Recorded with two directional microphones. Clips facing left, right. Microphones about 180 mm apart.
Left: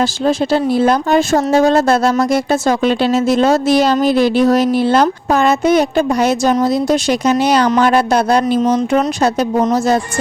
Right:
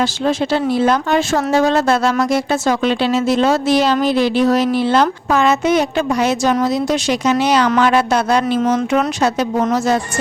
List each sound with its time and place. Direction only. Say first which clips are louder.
0.0 s speech: left 2 dB; 40° left (ahead or behind)
8.5 s speech: left 2 dB; 15° left (ahead or behind)
8.9 s speech: left 2 dB; 35° left (ahead or behind)